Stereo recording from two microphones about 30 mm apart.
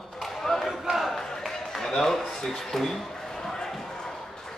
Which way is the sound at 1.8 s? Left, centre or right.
Centre.